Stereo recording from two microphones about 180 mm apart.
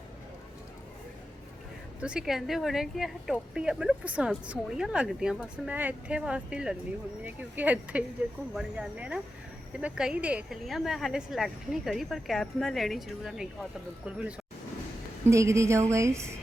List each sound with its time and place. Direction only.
2.0 s a woman's voice: 5° right (ahead or behind)
15.3 s speech: 15° right (ahead or behind)